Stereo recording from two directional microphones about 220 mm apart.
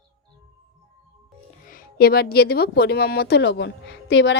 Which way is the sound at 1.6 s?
40° left (ahead or behind).